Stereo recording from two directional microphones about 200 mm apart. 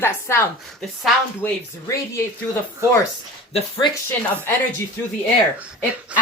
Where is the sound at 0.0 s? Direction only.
10° left (ahead or behind).